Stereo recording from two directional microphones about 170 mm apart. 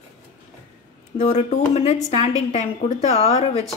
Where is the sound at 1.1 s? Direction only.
40° left (ahead or behind).